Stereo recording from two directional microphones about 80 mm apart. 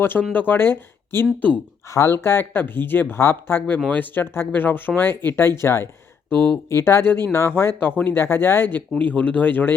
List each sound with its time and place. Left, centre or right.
0.0 s speech: left
1.9 s speech: left